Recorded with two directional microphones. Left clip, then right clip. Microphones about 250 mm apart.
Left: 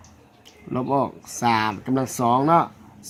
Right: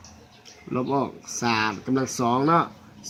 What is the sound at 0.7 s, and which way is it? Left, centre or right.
Speech, left.